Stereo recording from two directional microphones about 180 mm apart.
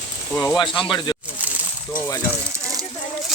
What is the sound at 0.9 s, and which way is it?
Speech, 25° left (ahead or behind).